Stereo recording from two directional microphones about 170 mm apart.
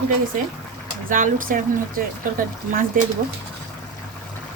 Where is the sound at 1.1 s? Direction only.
55° right (ahead or behind).